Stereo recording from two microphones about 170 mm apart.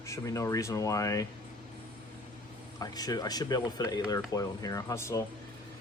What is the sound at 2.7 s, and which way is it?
Speech, 20° left (ahead or behind).